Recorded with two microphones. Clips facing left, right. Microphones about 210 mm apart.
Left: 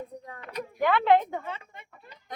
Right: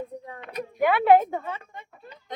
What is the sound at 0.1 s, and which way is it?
Speech, 30° right (ahead or behind).